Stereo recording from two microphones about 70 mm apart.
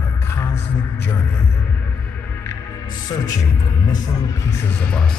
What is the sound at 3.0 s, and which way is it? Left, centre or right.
Speech, left.